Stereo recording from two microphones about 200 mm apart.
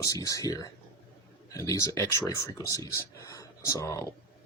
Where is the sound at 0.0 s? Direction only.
15° left (ahead or behind).